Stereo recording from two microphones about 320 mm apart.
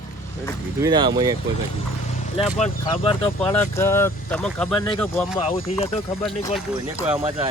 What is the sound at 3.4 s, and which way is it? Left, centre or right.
Speech, centre.